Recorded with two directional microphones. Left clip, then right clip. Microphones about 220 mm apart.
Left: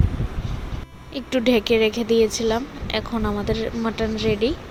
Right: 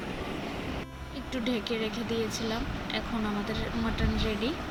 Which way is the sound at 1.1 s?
40° left (ahead or behind).